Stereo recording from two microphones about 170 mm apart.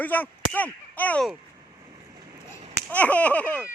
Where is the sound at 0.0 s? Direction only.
10° left (ahead or behind).